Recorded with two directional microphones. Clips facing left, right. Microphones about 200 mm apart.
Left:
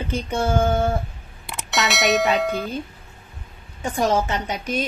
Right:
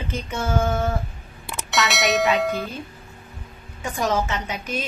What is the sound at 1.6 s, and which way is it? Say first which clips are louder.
Speech: left 1 dB; centre (ahead or behind).